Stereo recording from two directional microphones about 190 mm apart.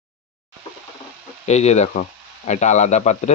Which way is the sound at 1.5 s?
35° left (ahead or behind).